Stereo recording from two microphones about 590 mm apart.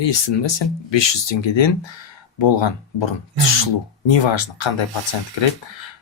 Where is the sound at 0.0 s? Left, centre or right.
Left.